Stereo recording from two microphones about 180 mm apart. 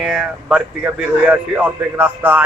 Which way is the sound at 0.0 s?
Centre (ahead or behind).